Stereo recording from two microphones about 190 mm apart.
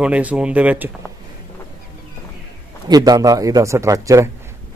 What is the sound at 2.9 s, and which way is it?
A man's voice, 20° right (ahead or behind).